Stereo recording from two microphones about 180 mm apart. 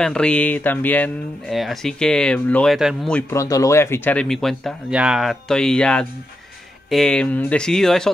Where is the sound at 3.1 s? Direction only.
15° left (ahead or behind).